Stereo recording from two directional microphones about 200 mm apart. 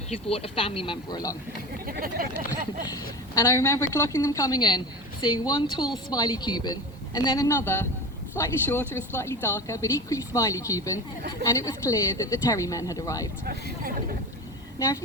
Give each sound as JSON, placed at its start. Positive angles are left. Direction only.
{"t": 0.3, "sound": "a woman's voice", "side_deg": 30}
{"t": 1.9, "sound": "speech", "side_deg": -45}
{"t": 3.3, "sound": "a woman's voice", "side_deg": 15}